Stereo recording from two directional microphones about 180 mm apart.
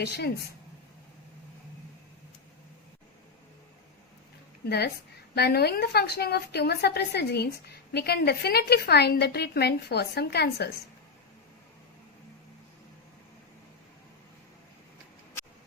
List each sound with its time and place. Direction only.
0.0 s a woman's voice: 65° left (ahead or behind)
5.3 s a woman's voice: 60° left (ahead or behind)